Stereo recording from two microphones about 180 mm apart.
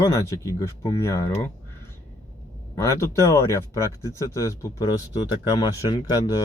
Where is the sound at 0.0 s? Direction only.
20° left (ahead or behind).